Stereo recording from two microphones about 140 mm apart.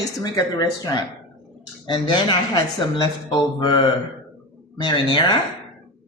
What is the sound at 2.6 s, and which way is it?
Speech, 30° left (ahead or behind).